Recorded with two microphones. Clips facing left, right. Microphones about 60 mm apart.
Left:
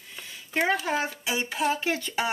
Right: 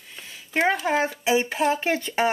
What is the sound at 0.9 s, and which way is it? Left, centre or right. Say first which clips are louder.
Speech: right 6 dB; right.